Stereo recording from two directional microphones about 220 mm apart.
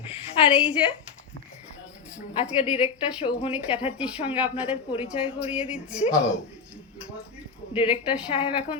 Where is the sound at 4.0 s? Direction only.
5° right (ahead or behind).